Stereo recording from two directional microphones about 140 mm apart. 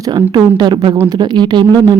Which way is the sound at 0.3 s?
30° right (ahead or behind).